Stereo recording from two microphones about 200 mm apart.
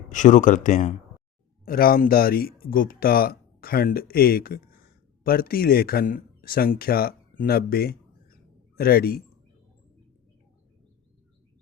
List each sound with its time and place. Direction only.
0.1 s a man's voice: 40° left (ahead or behind)